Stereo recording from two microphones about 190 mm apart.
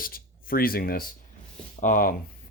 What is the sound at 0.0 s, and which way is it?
Speech, 50° left (ahead or behind).